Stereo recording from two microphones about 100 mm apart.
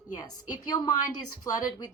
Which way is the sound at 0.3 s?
45° left (ahead or behind).